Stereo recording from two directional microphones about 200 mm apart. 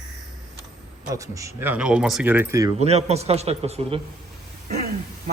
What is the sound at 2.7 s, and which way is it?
Speech, 30° right (ahead or behind).